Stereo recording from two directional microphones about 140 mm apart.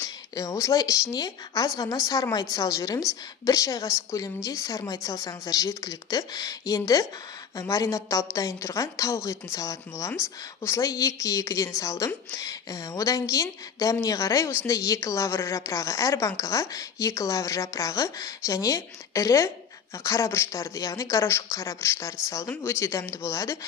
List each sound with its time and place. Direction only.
0.0 s a woman's voice: 20° left (ahead or behind)